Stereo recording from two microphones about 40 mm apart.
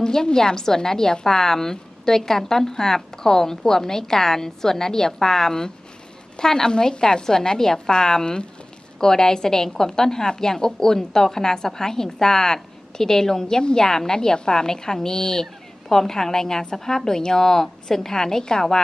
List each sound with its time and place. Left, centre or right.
0.0 s a woman's voice: centre